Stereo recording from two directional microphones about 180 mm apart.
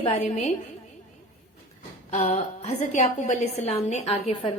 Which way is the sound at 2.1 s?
40° left (ahead or behind).